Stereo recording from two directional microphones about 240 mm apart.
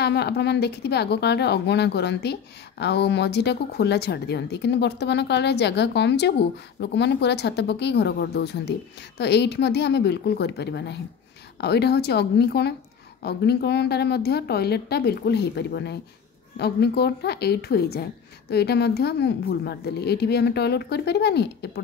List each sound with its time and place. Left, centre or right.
0.0 s a woman's voice: left